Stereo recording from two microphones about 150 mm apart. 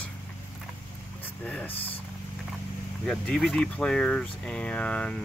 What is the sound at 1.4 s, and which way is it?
Speech, 5° left (ahead or behind).